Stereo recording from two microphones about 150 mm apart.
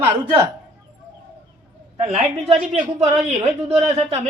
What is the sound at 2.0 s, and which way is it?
Speech, 45° right (ahead or behind).